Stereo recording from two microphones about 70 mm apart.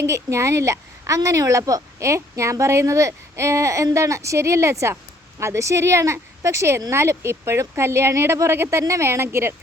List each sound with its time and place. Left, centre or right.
0.0 s a woman's voice: right